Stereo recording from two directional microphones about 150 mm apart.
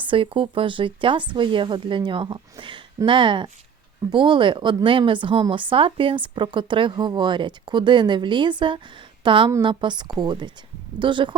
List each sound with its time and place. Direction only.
0.0 s a woman's voice: 35° right (ahead or behind)